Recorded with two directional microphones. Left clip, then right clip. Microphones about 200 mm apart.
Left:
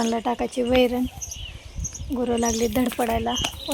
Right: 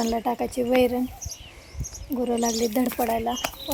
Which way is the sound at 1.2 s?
25° left (ahead or behind).